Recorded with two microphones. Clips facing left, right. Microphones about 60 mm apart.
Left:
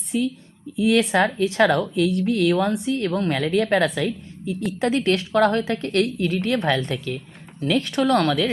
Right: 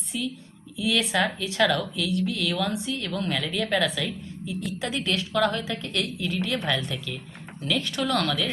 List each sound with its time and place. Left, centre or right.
0.1 s speech: left